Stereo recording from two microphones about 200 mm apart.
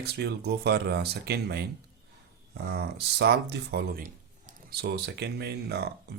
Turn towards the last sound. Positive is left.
turn(degrees=-55)  # may be behind; listen again after turning